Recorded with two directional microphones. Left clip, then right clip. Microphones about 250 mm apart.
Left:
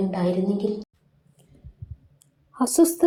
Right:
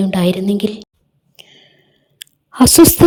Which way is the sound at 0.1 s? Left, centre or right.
Right.